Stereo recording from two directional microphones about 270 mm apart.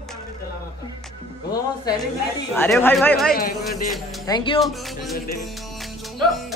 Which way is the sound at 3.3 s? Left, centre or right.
Left.